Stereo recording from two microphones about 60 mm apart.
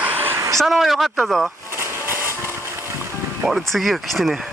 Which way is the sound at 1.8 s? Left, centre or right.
Right.